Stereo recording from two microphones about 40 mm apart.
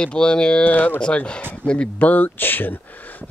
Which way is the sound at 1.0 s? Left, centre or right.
Left.